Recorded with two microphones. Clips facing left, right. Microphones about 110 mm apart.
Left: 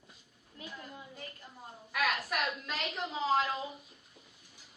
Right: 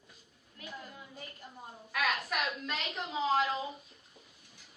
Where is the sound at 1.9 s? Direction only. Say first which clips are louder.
Even; centre (ahead or behind).